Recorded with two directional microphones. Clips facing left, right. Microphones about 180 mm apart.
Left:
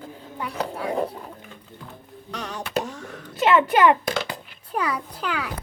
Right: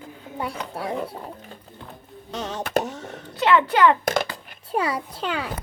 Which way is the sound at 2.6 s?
45° right (ahead or behind).